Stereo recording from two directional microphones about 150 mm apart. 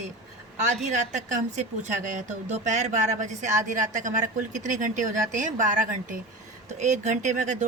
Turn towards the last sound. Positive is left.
turn(degrees=-55)  # may be behind; listen again after turning